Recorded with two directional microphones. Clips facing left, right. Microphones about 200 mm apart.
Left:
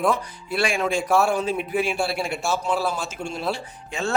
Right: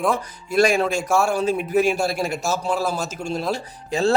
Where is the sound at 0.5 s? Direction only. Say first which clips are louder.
Right 5 dB; 40° right (ahead or behind).